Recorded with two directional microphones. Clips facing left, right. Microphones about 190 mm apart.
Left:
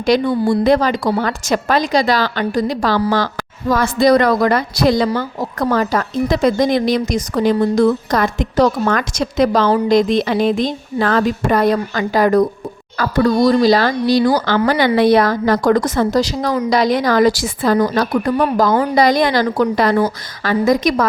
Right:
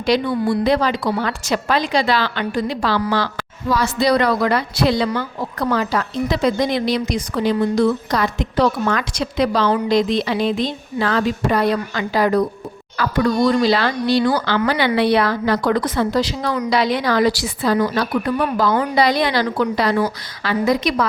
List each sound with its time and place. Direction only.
0.0 s a woman's voice: 45° left (ahead or behind)